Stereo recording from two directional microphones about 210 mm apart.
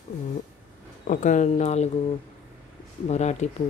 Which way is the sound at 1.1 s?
35° left (ahead or behind).